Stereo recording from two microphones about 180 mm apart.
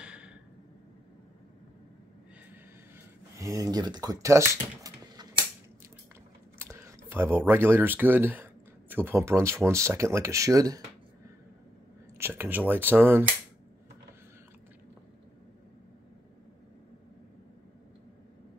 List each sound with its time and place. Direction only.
0.0 s a sound: 5° right (ahead or behind)
3.3 s speech: 20° right (ahead or behind)
6.6 s speech: 15° right (ahead or behind)
12.2 s speech: 10° right (ahead or behind)